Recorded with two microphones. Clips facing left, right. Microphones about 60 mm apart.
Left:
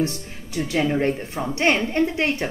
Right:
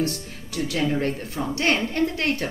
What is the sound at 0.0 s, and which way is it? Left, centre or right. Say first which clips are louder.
A woman's voice: left 2 dB; left.